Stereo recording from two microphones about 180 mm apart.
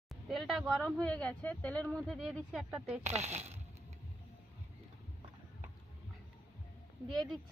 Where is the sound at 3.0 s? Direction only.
40° right (ahead or behind).